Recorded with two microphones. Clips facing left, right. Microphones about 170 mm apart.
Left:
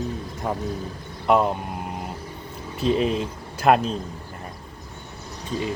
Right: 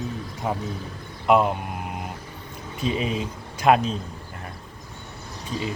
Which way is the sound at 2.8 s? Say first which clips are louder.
Left 4 dB; centre (ahead or behind).